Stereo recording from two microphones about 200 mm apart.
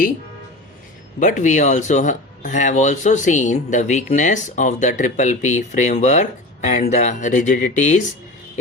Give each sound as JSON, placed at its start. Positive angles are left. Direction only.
{"t": 1.2, "sound": "speech", "side_deg": 40}